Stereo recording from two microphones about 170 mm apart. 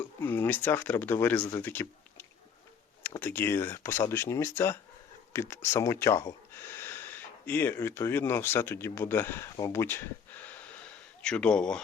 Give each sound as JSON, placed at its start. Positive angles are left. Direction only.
{"t": 0.0, "sound": "speech", "side_deg": 10}